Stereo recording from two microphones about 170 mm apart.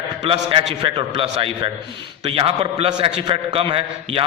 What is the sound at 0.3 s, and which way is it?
A man's voice, 30° right (ahead or behind).